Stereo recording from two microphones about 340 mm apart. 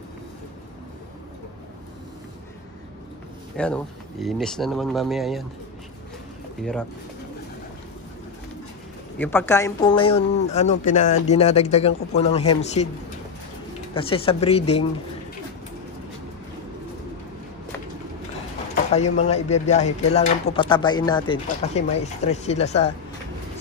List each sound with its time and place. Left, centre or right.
3.5 s speech: centre
6.6 s speech: centre
9.2 s speech: centre
13.9 s speech: centre
18.9 s speech: centre